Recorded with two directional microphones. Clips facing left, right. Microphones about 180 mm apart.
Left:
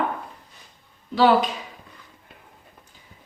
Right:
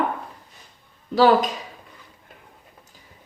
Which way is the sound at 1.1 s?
40° right (ahead or behind).